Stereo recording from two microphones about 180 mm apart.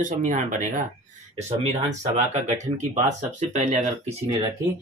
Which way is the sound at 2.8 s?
40° right (ahead or behind).